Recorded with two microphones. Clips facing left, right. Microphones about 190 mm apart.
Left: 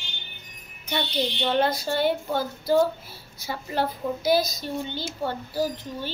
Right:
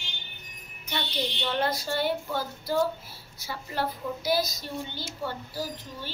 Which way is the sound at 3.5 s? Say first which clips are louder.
Left 4 dB; 20° left (ahead or behind).